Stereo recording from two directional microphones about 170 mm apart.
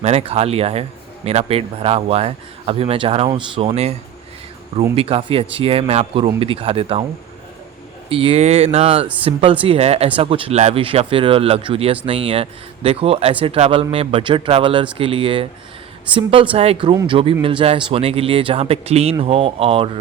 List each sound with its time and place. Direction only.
0.0 s a man's voice: 35° right (ahead or behind)
4.9 s a man's voice: 35° right (ahead or behind)
8.1 s a man's voice: 35° right (ahead or behind)